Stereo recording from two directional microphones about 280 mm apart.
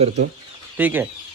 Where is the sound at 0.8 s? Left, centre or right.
Centre.